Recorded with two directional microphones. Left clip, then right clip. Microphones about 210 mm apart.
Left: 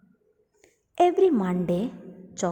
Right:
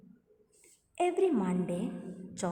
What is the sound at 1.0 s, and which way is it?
A woman's voice, 35° left (ahead or behind).